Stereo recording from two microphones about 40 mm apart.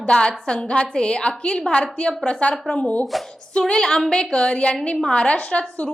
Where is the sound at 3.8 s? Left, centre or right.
Centre.